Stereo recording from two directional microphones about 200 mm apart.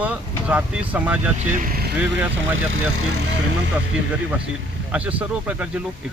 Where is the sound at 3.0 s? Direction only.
90° right.